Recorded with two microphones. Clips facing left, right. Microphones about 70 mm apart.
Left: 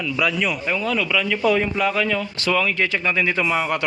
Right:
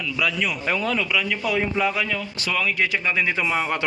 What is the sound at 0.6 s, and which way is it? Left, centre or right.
Speech, right.